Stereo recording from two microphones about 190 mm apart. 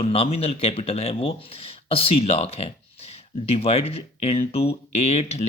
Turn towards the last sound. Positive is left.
turn(degrees=35)  # may be behind; listen again after turning